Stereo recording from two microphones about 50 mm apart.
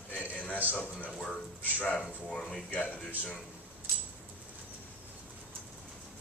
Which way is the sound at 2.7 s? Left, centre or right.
Left.